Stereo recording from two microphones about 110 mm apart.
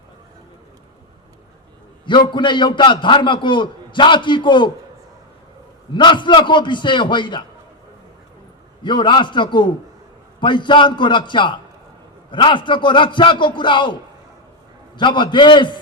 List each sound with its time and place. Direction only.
2.0 s a man's voice: 45° left (ahead or behind)
5.9 s a man's voice: 45° left (ahead or behind)
8.8 s a man's voice: 45° left (ahead or behind)
14.9 s a man's voice: 45° left (ahead or behind)